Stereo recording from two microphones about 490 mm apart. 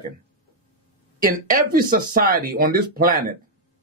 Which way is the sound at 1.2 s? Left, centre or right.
Centre.